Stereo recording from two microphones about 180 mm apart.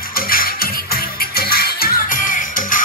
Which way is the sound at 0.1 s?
55° left (ahead or behind).